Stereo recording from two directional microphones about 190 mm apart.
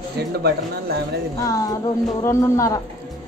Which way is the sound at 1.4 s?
20° left (ahead or behind).